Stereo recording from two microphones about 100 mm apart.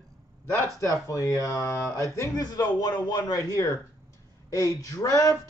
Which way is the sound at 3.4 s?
30° left (ahead or behind).